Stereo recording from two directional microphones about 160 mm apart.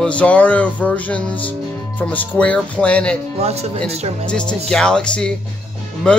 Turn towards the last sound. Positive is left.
turn(degrees=5)  # may be behind; listen again after turning